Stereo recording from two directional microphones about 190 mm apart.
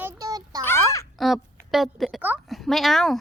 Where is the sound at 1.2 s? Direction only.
Centre (ahead or behind).